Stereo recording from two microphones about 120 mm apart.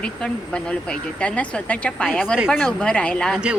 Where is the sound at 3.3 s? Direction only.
10° right (ahead or behind).